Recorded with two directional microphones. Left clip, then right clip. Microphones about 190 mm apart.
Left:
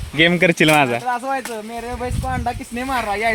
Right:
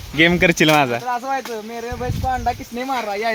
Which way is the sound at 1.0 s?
45° left (ahead or behind).